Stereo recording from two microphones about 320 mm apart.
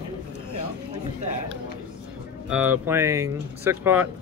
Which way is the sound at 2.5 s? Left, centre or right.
Centre.